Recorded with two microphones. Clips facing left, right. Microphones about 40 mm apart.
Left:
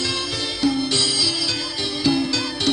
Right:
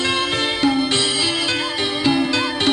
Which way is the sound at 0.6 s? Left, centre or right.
Right.